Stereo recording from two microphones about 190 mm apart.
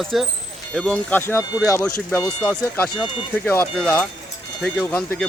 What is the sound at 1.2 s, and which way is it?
Speech, 15° left (ahead or behind).